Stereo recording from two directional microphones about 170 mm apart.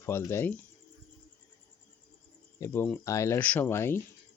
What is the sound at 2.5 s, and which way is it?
Speech, 15° left (ahead or behind).